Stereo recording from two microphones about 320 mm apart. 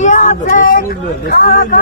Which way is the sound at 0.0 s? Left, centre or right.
Left.